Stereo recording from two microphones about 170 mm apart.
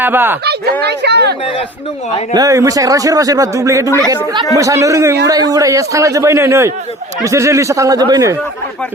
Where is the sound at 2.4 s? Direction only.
20° right (ahead or behind).